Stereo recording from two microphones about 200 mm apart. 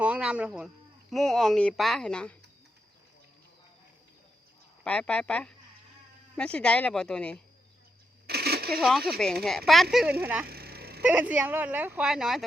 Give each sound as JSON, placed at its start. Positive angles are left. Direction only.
{"t": 0.0, "sound": "speech", "side_deg": -5}
{"t": 4.8, "sound": "speech", "side_deg": 5}
{"t": 8.3, "sound": "a sound", "side_deg": -50}
{"t": 8.8, "sound": "speech", "side_deg": 0}
{"t": 10.4, "sound": "vehicle", "side_deg": -50}
{"t": 11.0, "sound": "speech", "side_deg": -5}